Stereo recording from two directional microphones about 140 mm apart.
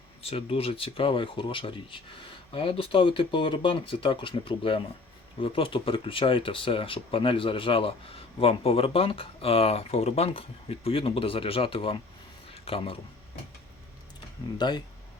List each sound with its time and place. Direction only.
0.2 s speech: 45° left (ahead or behind)